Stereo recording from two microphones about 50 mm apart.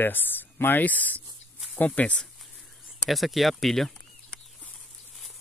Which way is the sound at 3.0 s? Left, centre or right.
Centre.